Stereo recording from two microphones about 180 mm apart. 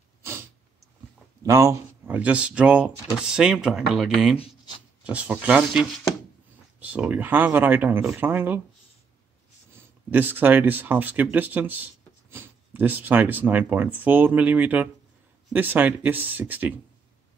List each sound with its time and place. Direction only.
0.2 s a sound: 15° right (ahead or behind)
1.4 s speech: 15° right (ahead or behind)
4.4 s writing: 30° left (ahead or behind)
5.0 s speech: 5° right (ahead or behind)
9.7 s speech: 10° right (ahead or behind)